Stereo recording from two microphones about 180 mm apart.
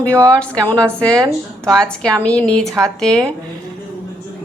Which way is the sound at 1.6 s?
5° left (ahead or behind).